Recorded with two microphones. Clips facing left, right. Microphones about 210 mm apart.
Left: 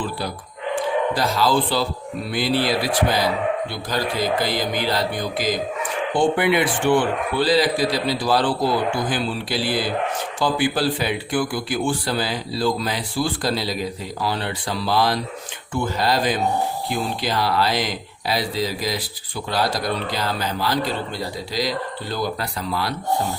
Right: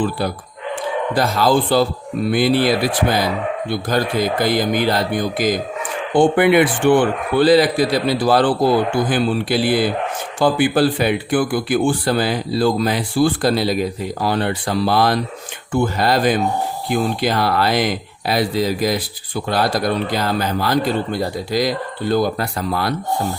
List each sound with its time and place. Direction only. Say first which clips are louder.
1.1 s a man's voice: right 7 dB; 55° right (ahead or behind)